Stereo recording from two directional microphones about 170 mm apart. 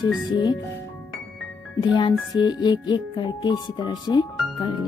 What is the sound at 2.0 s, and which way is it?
Music, 25° left (ahead or behind).